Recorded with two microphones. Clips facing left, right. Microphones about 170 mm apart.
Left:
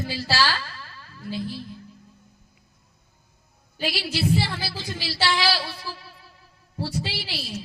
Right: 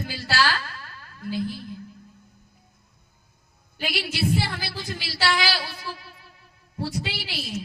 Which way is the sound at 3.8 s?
30° left (ahead or behind).